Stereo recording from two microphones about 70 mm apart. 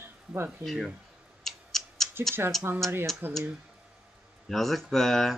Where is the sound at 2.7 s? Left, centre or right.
Right.